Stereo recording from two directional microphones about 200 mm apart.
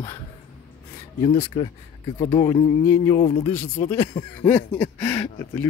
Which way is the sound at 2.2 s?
25° left (ahead or behind).